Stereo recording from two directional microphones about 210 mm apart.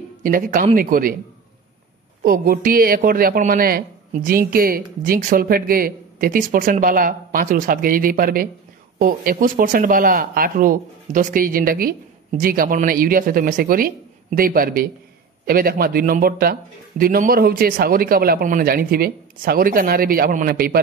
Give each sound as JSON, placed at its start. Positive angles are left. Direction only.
{"t": 0.2, "sound": "speech", "side_deg": -40}
{"t": 2.2, "sound": "a woman's voice", "side_deg": -45}